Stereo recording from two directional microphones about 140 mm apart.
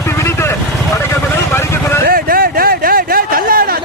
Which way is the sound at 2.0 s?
90° right.